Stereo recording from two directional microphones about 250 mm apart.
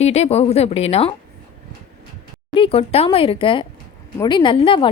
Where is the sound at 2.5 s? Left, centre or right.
Left.